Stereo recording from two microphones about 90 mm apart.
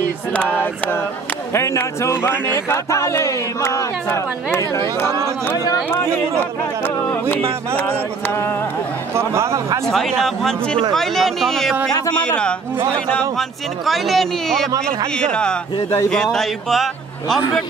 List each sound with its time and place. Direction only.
0.3 s a man's voice: 15° left (ahead or behind)
1.5 s a man's voice: 30° left (ahead or behind)
9.1 s speech: 30° right (ahead or behind)
9.8 s a man's voice: 5° left (ahead or behind)
13.8 s a man's voice: centre (ahead or behind)